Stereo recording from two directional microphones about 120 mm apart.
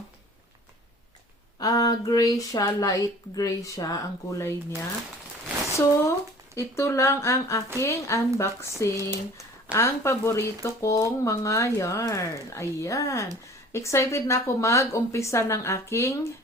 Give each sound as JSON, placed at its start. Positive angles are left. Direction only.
{"t": 1.5, "sound": "speech", "side_deg": 30}
{"t": 5.7, "sound": "speech", "side_deg": 25}